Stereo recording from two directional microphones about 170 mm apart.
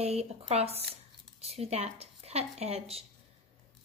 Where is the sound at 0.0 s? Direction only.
40° right (ahead or behind).